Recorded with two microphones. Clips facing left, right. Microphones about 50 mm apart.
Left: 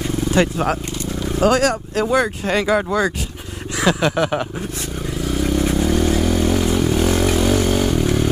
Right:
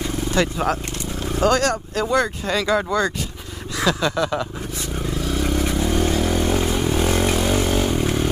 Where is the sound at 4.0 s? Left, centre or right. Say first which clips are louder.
Left 3 dB; left.